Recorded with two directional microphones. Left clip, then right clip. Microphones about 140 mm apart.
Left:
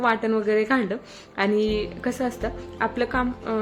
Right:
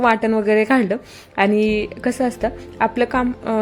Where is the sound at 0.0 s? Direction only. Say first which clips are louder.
Right 6 dB; 40° right (ahead or behind).